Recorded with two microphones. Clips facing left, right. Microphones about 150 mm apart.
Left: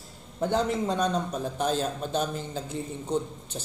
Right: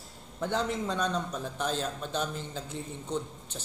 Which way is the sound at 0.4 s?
40° left (ahead or behind).